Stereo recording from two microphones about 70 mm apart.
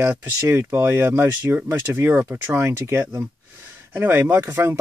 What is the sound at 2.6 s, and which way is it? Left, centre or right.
Speech, right.